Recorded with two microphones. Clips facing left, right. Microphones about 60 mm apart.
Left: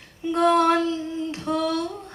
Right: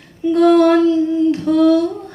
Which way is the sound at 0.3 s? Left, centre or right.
Centre.